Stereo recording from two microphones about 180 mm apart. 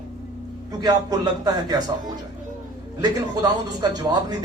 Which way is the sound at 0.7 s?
20° right (ahead or behind).